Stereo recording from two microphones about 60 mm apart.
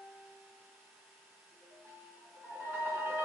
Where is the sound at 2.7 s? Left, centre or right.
Right.